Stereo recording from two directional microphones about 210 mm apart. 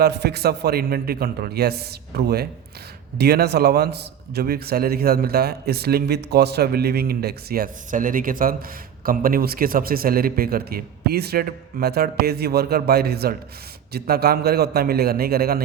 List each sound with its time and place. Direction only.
0.0 s a man's voice: 50° right (ahead or behind)